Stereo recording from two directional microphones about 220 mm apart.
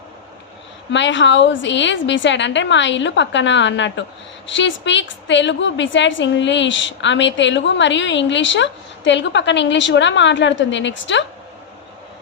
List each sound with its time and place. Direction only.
0.9 s a woman's voice: 55° left (ahead or behind)